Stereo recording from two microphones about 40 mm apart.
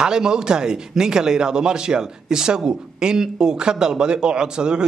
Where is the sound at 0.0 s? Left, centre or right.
Centre.